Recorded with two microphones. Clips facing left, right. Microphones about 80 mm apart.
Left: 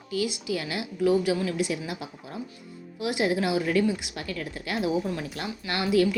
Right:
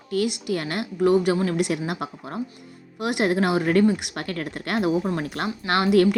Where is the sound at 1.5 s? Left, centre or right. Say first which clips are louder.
Right 5 dB; right.